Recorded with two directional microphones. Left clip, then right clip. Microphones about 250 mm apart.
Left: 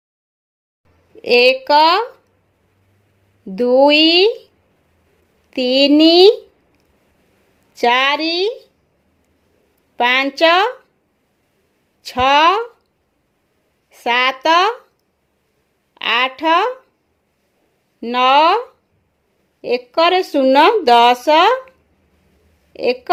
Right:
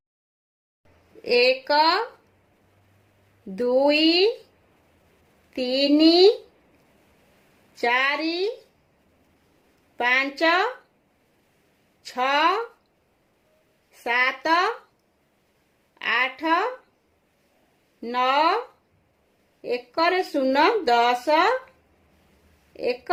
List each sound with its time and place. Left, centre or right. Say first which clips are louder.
1.2 s speech: left 8 dB; left
3.5 s speech: left 9 dB; left
5.5 s speech: left 8 dB; left
7.8 s speech: left 8 dB; left
10.0 s speech: left 8 dB; left
12.0 s speech: left 9 dB; left
13.9 s speech: left 7 dB; left
16.0 s speech: left 7 dB; left
18.0 s speech: left 9 dB; left
19.6 s speech: left 8 dB; left
22.7 s speech: left 9 dB; left